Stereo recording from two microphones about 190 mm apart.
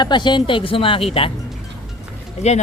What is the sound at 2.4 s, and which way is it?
Speech, 35° left (ahead or behind).